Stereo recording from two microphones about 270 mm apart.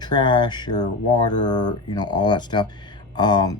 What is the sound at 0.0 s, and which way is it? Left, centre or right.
Speech, centre.